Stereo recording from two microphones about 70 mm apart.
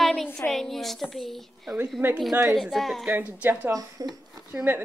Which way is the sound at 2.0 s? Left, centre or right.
Right.